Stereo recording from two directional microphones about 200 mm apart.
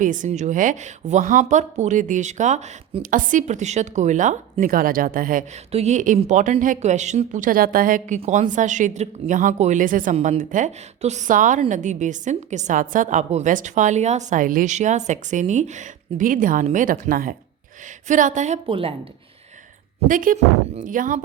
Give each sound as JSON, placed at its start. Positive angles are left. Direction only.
{"t": 0.0, "sound": "speech", "side_deg": -40}
{"t": 20.1, "sound": "speech", "side_deg": -40}